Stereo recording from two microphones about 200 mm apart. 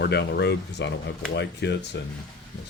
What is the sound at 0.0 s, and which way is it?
Speech, 55° left (ahead or behind).